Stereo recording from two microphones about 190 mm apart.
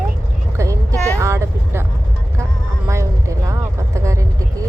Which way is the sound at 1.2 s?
15° right (ahead or behind).